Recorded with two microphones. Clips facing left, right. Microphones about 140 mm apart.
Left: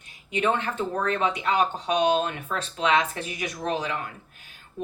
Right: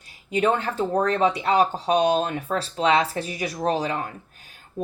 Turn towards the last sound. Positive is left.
turn(degrees=-35)  # may be behind; listen again after turning